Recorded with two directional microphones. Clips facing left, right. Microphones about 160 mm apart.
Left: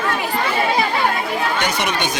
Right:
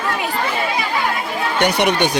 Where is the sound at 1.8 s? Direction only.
60° right (ahead or behind).